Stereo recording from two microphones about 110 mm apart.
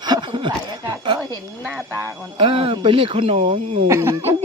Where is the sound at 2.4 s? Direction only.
55° right (ahead or behind).